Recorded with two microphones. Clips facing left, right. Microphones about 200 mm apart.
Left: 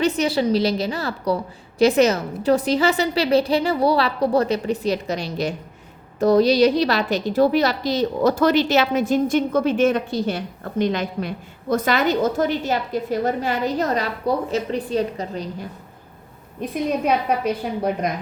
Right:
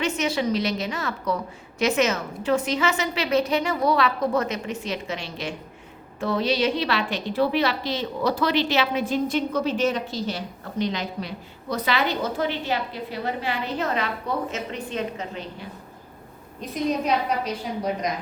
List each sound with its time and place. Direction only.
0.0 s a woman's voice: 35° left (ahead or behind)
17.2 s a woman's voice: 55° left (ahead or behind)